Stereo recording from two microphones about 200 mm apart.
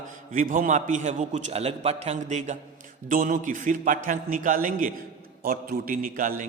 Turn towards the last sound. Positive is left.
turn(degrees=-45)  # may be behind; listen again after turning